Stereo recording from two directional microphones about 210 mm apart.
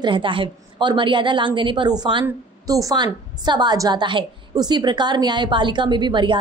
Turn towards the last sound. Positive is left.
turn(degrees=-20)  # may be behind; listen again after turning